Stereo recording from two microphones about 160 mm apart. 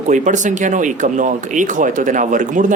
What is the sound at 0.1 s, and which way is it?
Speech, 50° right (ahead or behind).